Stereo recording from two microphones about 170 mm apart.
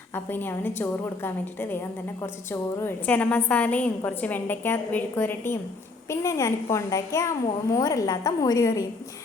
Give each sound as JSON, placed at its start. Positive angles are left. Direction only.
{"t": 0.3, "sound": "a woman's voice", "side_deg": 10}